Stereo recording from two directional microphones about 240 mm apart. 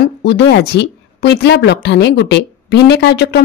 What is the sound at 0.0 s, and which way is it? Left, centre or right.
Speech, left.